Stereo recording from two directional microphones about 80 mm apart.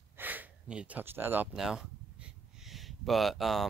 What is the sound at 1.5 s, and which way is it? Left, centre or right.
Speech, centre.